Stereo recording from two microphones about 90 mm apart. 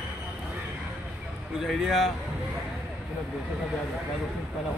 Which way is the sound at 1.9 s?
Centre (ahead or behind).